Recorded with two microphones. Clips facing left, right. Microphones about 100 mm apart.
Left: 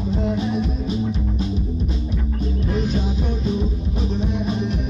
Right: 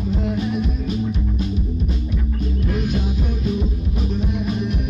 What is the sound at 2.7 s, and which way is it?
Music, 30° left (ahead or behind).